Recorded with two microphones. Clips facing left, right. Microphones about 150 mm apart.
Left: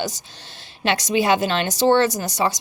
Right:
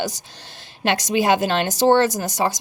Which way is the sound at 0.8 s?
50° right (ahead or behind).